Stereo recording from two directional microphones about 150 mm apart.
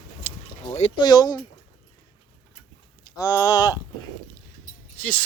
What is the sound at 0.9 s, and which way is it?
Speech, 30° left (ahead or behind).